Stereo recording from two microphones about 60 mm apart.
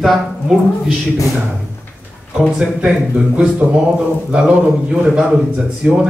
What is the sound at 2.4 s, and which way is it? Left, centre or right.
A man's voice, centre.